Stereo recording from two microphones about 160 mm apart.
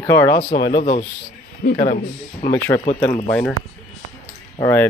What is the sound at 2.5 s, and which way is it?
Speech, 15° left (ahead or behind).